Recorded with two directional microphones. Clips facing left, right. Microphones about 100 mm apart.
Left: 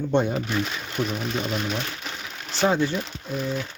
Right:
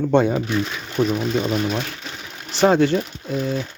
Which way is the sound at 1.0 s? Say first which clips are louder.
Right 8 dB; 60° right (ahead or behind).